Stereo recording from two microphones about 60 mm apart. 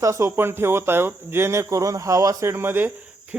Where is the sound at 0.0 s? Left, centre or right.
Right.